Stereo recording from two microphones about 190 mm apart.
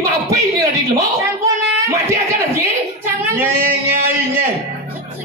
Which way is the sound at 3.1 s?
10° right (ahead or behind).